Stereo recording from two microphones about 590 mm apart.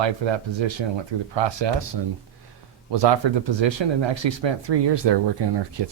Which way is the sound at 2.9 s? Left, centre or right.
Right.